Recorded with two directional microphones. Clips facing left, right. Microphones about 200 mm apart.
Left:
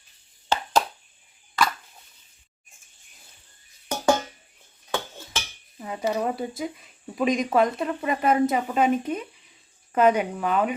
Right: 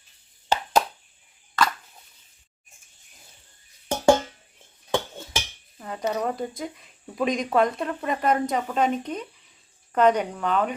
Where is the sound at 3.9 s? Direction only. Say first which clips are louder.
Right 3 dB; 25° right (ahead or behind).